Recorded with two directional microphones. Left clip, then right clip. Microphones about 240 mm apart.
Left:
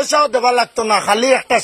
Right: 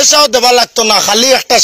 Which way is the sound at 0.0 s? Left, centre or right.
Right.